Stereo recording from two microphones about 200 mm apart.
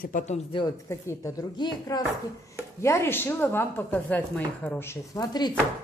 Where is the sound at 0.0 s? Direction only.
40° left (ahead or behind).